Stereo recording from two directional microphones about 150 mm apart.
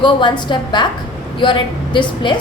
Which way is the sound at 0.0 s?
30° left (ahead or behind).